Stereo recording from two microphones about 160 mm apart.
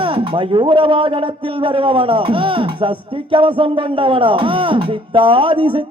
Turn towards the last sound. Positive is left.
turn(degrees=-35)  # may be behind; listen again after turning